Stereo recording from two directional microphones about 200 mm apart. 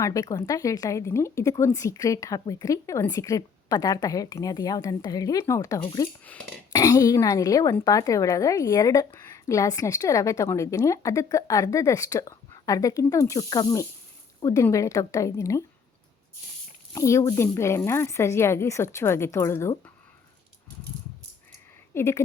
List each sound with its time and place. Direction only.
0.0 s a woman's voice: 15° left (ahead or behind)
6.2 s a woman's voice: 5° left (ahead or behind)
6.7 s a woman's voice: 20° left (ahead or behind)
16.9 s a woman's voice: 15° left (ahead or behind)
21.9 s a woman's voice: 15° left (ahead or behind)